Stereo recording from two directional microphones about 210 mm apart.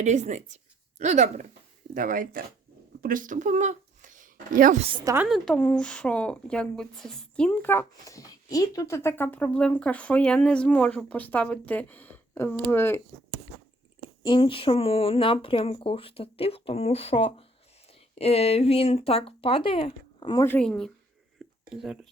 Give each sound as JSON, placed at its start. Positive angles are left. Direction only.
{"t": 0.0, "sound": "a woman's voice", "side_deg": -35}
{"t": 5.0, "sound": "a woman's voice", "side_deg": -10}
{"t": 5.3, "sound": "speech", "side_deg": 5}
{"t": 14.2, "sound": "speech", "side_deg": 25}